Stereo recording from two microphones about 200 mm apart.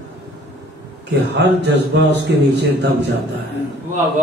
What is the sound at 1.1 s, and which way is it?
A man's voice, 60° right (ahead or behind).